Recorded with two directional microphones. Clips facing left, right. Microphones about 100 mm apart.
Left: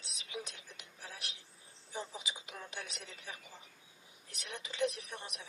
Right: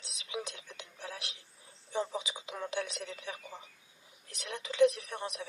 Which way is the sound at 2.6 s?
90° right.